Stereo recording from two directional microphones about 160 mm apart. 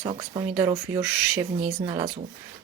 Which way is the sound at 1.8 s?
30° right (ahead or behind).